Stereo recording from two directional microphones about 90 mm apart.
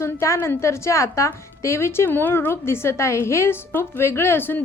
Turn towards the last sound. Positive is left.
turn(degrees=25)  # may be behind; listen again after turning